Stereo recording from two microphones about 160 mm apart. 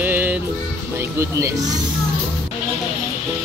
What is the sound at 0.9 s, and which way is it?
Speech, 15° right (ahead or behind).